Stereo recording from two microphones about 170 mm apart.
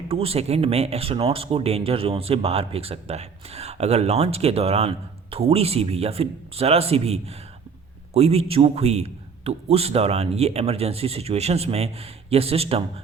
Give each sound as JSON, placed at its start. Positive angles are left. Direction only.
{"t": 0.1, "sound": "speech", "side_deg": -35}